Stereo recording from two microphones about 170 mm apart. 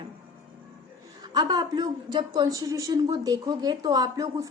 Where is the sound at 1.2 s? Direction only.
25° right (ahead or behind).